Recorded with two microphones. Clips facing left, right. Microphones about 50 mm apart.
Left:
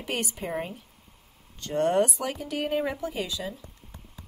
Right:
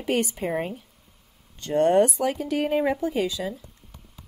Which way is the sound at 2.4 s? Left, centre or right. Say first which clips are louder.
Right 3 dB; right.